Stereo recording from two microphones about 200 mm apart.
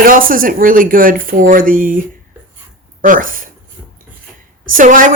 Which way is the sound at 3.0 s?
45° right (ahead or behind).